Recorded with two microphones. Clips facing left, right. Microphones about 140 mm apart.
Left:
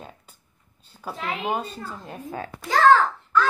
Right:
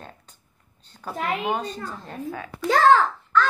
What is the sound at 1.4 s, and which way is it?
Child singing, 5° left (ahead or behind).